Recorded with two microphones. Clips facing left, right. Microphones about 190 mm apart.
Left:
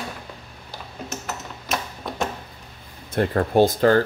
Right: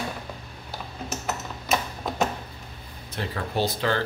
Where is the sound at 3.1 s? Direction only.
50° left (ahead or behind).